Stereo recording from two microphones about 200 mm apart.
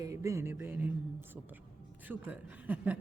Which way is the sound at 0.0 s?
15° right (ahead or behind).